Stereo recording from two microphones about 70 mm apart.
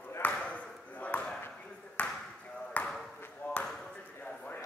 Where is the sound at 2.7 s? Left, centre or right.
Left.